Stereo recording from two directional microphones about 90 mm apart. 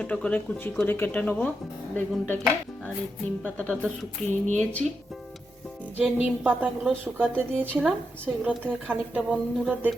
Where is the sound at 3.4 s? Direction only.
10° left (ahead or behind).